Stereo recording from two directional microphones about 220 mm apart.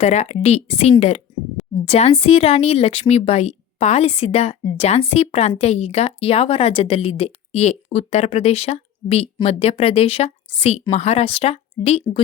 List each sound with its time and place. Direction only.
0.0 s speech: 30° left (ahead or behind)